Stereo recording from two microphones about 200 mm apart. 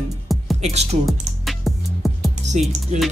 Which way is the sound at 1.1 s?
Centre (ahead or behind).